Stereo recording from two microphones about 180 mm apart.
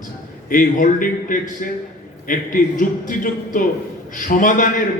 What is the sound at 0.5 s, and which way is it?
A man's voice, 50° left (ahead or behind).